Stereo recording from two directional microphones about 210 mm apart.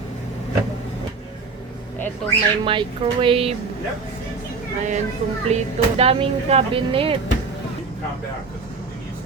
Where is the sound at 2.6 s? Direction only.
25° right (ahead or behind).